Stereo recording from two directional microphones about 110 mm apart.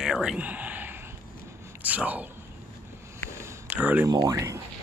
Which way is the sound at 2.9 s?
25° right (ahead or behind).